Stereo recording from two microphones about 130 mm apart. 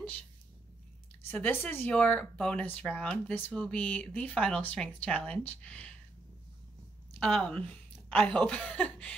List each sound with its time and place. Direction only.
1.2 s speech: 15° left (ahead or behind)
7.2 s speech: 5° left (ahead or behind)